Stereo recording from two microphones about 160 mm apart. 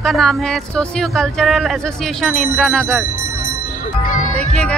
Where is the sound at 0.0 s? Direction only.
Centre (ahead or behind).